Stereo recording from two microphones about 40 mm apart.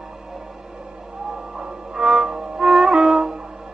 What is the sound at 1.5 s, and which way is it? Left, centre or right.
Music, centre.